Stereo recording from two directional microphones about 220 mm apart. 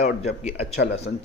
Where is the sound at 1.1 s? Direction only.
50° left (ahead or behind).